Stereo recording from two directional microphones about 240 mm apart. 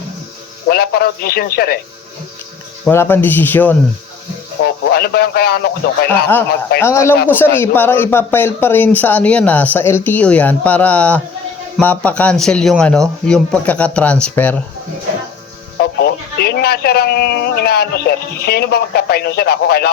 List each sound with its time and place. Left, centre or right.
0.7 s speech: left
2.8 s speech: centre
4.6 s speech: left
6.7 s speech: centre
15.8 s speech: left